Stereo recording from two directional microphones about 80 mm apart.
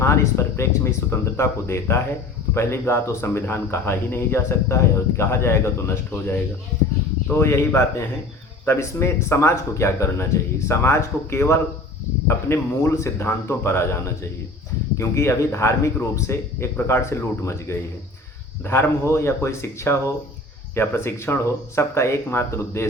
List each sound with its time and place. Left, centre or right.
0.0 s speech: left